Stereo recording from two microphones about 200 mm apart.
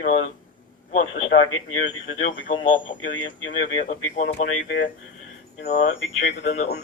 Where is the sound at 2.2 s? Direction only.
40° left (ahead or behind).